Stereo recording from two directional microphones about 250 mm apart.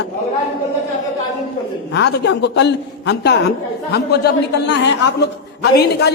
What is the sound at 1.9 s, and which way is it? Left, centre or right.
A man's voice, left.